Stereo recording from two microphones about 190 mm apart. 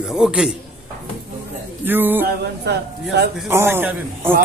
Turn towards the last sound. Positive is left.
turn(degrees=-10)  # may be behind; listen again after turning